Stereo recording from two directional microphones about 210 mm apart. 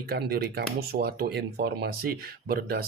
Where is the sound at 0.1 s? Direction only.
50° right (ahead or behind).